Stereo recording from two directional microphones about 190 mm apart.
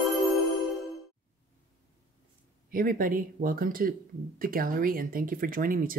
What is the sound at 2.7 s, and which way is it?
Speech, 50° right (ahead or behind).